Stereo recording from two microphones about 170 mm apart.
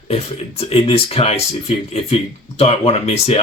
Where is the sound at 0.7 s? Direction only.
35° left (ahead or behind).